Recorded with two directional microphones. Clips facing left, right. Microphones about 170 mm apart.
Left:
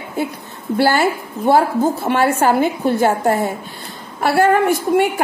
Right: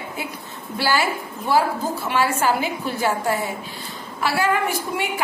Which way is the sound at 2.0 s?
55° left (ahead or behind).